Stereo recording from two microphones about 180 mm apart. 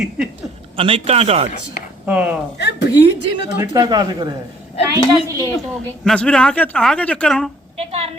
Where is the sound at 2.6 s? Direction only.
75° left (ahead or behind).